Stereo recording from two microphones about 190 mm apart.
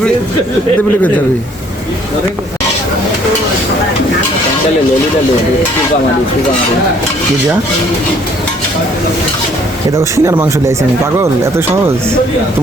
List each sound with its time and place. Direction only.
10.0 s speech: 15° right (ahead or behind)